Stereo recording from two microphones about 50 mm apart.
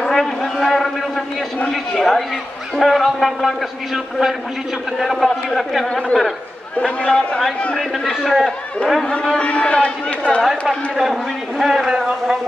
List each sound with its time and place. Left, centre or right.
0.0 s a sound: centre
1.7 s a man's voice: centre
6.1 s a man's voice: left; by 8.4 s centre
9.2 s a man's voice: centre
11.0 s a man's voice: centre